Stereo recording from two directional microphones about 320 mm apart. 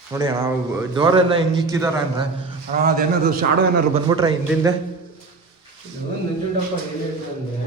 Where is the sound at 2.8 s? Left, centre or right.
Right.